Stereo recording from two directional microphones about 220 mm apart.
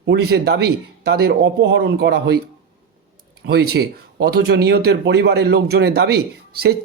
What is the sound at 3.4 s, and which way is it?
Speech, 45° right (ahead or behind).